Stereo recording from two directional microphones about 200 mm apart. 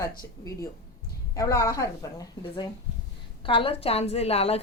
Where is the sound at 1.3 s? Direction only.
15° left (ahead or behind).